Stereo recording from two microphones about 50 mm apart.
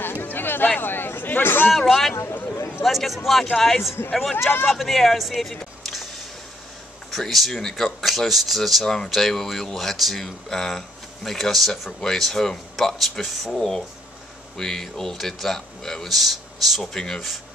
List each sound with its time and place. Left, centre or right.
0.0 s a sound: left
0.7 s speech: left
1.7 s speech: centre
2.4 s speech: left
2.8 s speech: centre
5.5 s music: centre
7.1 s speech: centre
13.6 s speech: centre